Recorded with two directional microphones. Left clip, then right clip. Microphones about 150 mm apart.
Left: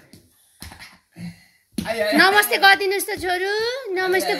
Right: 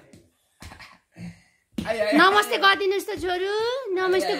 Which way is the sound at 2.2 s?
25° right (ahead or behind).